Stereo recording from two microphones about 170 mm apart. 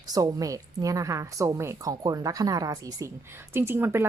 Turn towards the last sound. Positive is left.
turn(degrees=-15)  # may be behind; listen again after turning